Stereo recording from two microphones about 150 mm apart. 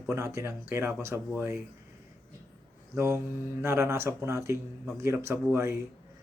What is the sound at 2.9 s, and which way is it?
Speech, 15° right (ahead or behind).